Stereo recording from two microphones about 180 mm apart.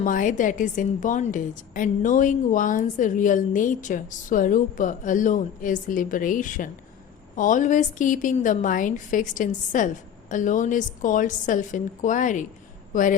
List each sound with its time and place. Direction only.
0.0 s a woman's voice: 45° left (ahead or behind)